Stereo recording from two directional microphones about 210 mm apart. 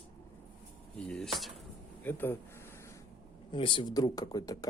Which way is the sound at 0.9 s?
5° left (ahead or behind).